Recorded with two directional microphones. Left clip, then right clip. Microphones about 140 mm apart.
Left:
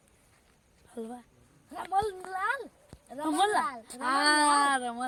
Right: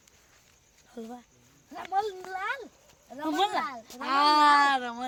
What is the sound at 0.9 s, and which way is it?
Speech, 15° left (ahead or behind).